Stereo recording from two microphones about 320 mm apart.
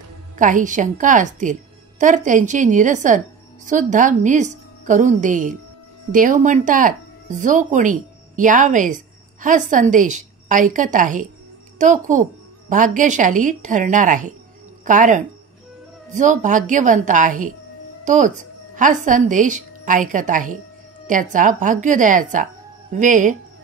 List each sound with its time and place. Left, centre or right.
0.4 s a woman's voice: right